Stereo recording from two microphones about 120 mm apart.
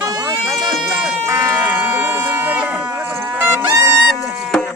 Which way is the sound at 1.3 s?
25° right (ahead or behind).